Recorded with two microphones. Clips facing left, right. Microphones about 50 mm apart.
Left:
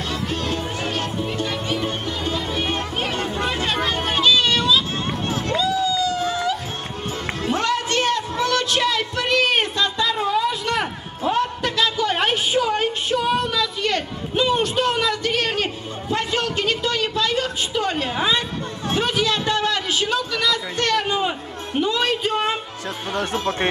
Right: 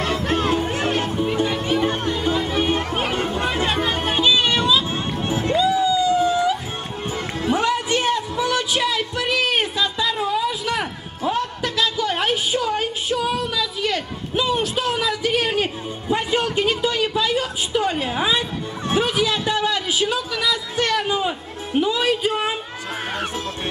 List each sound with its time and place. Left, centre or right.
0.0 s music: right
1.0 s music: centre
5.5 s a sound: centre
7.4 s music: centre
12.7 s a sound: centre
21.0 s music: centre
21.7 s music: centre